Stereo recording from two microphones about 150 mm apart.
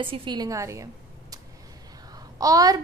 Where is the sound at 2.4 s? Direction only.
25° right (ahead or behind).